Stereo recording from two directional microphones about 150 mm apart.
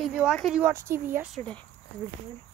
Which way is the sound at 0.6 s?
15° right (ahead or behind).